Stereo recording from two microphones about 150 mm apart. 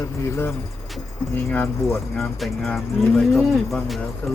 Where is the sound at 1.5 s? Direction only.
15° left (ahead or behind).